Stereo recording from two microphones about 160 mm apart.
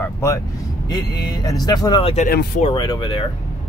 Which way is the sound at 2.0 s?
40° left (ahead or behind).